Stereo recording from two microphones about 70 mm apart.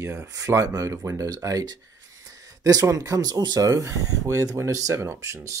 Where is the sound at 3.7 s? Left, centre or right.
Right.